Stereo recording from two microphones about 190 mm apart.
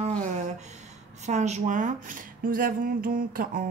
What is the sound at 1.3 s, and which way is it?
Speech, 35° right (ahead or behind).